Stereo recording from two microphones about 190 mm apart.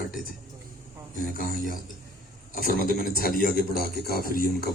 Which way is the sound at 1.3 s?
50° left (ahead or behind).